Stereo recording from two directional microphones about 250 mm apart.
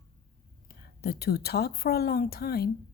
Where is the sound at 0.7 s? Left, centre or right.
Left.